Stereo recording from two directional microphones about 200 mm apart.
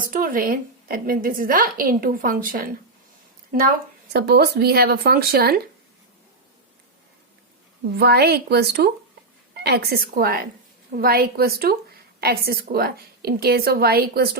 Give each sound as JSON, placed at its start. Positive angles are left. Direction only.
{"t": 0.0, "sound": "a woman's voice", "side_deg": -45}
{"t": 4.1, "sound": "a woman's voice", "side_deg": -55}
{"t": 7.9, "sound": "a woman's voice", "side_deg": -55}